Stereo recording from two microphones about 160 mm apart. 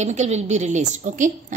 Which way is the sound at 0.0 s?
45° right (ahead or behind).